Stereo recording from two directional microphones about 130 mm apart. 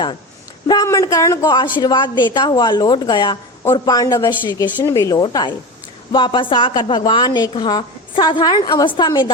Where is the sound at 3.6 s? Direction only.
25° left (ahead or behind).